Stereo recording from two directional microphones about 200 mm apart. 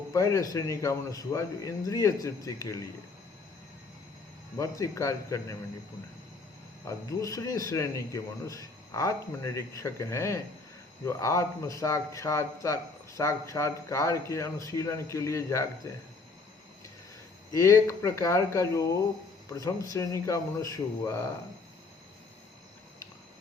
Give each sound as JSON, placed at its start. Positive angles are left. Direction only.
{"t": 0.1, "sound": "a man's voice", "side_deg": 15}
{"t": 4.5, "sound": "a man's voice", "side_deg": 15}
{"t": 6.8, "sound": "a man's voice", "side_deg": 15}
{"t": 17.5, "sound": "a man's voice", "side_deg": 15}